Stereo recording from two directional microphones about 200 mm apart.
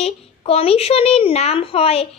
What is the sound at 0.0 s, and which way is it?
A child's voice, 30° left (ahead or behind).